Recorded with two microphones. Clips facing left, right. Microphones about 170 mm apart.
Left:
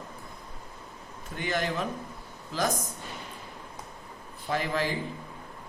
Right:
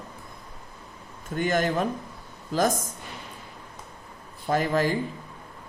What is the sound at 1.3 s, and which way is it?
Speech, 45° right (ahead or behind).